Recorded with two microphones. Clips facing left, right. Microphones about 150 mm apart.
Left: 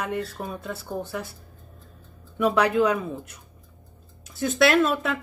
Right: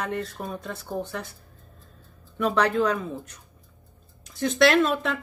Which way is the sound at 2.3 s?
10° left (ahead or behind).